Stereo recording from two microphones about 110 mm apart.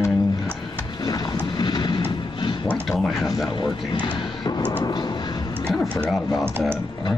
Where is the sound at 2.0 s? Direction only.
40° left (ahead or behind).